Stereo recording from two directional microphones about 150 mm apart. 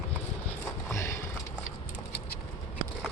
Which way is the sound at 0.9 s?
20° left (ahead or behind).